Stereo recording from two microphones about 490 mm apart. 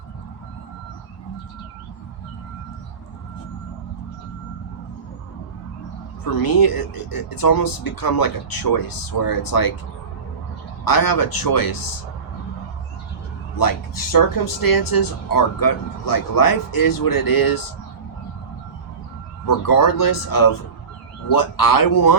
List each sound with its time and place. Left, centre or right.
6.3 s speech: left
10.8 s speech: left
13.6 s speech: left
19.5 s speech: left